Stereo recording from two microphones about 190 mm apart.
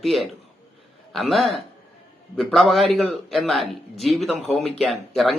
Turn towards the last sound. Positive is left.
turn(degrees=35)  # may be behind; listen again after turning